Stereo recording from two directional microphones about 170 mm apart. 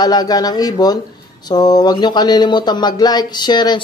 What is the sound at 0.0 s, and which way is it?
Speech, 25° left (ahead or behind).